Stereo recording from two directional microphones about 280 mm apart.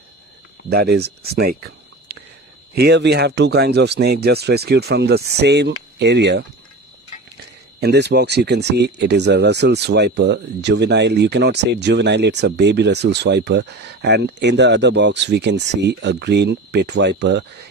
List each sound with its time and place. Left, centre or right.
0.7 s speech: right
2.7 s speech: right
7.8 s speech: right